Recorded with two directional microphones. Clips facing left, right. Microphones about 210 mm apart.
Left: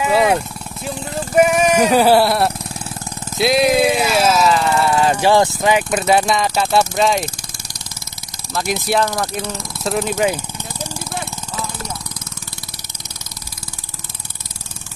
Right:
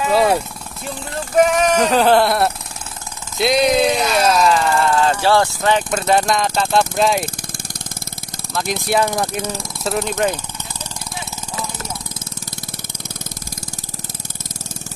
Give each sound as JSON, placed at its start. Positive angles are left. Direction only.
{"t": 0.0, "sound": "speech", "side_deg": 5}
{"t": 8.7, "sound": "speech", "side_deg": 5}
{"t": 9.8, "sound": "speech", "side_deg": 5}